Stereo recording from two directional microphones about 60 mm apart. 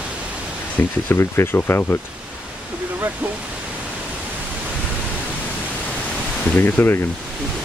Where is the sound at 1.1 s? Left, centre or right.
Left.